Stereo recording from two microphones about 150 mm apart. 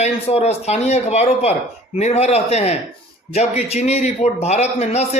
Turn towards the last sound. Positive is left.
turn(degrees=45)  # may be behind; listen again after turning